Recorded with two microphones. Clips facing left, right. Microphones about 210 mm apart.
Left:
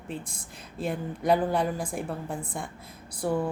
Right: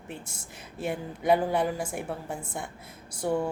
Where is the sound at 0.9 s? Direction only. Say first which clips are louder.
Even; 5° right (ahead or behind).